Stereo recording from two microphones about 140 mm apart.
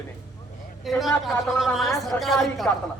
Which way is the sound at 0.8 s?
Centre (ahead or behind).